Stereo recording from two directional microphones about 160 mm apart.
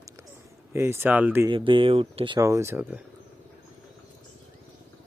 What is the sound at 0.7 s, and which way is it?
Speech, 15° right (ahead or behind).